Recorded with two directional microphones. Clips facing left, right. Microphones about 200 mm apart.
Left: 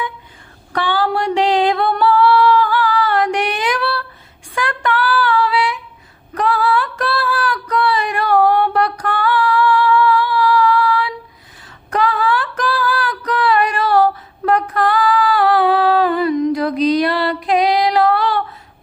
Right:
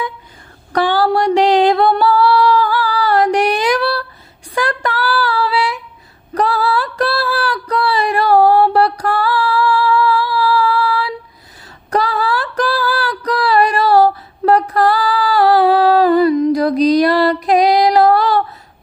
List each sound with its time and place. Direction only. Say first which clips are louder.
0.7 s singing: right 4 dB; 40° right (ahead or behind)
4.5 s female singing: right 1 dB; 35° right (ahead or behind)
6.3 s a sound: right 1 dB; 35° right (ahead or behind)
11.9 s music: even; 35° right (ahead or behind)